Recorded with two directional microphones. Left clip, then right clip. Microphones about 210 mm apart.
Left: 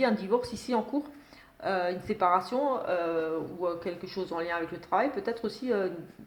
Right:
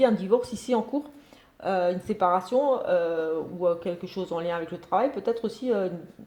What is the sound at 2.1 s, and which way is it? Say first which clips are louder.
Speech: right 2 dB; 30° right (ahead or behind).